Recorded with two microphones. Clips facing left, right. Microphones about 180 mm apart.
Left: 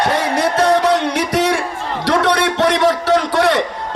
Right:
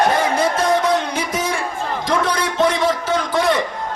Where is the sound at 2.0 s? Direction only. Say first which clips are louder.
Left 5 dB; 75° left (ahead or behind).